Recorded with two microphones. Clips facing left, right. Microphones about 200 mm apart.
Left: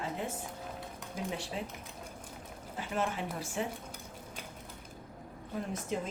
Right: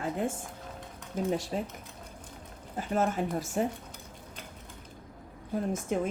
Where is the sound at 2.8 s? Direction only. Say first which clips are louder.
Right 6 dB; 45° right (ahead or behind).